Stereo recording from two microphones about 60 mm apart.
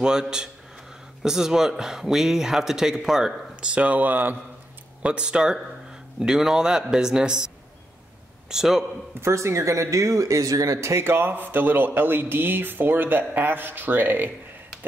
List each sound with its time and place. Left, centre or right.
0.0 s a man's voice: centre; by 4.4 s right
5.0 s a man's voice: centre
9.1 s speech: right